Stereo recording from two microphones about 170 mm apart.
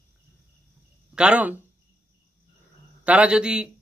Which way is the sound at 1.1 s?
5° right (ahead or behind).